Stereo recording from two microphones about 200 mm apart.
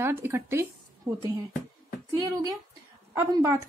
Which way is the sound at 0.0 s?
10° right (ahead or behind).